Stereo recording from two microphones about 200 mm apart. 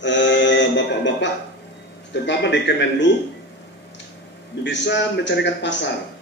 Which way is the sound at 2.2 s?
60° left (ahead or behind).